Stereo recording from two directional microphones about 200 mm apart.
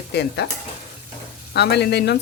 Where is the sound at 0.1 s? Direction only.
55° left (ahead or behind).